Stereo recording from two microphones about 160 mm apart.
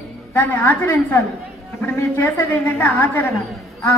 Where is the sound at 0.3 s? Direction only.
10° left (ahead or behind).